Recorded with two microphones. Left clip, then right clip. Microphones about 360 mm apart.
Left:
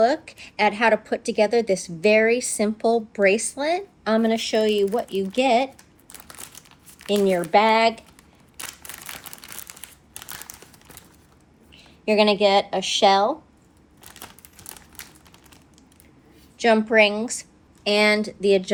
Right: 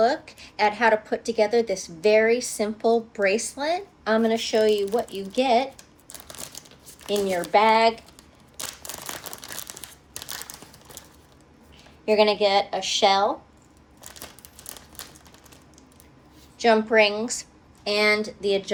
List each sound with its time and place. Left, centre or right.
0.0 s speech: left
7.1 s speech: left
12.0 s speech: left
16.6 s speech: left